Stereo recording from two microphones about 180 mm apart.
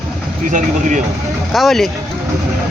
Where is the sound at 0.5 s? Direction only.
45° right (ahead or behind).